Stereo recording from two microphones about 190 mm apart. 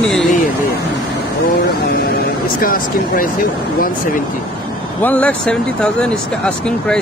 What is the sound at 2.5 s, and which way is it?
Speech, 45° left (ahead or behind).